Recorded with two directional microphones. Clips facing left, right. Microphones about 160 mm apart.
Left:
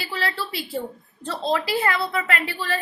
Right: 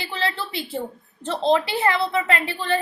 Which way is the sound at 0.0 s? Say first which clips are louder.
Right 1 dB; 25° right (ahead or behind).